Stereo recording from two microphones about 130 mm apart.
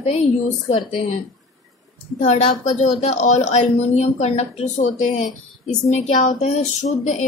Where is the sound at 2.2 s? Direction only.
65° left (ahead or behind).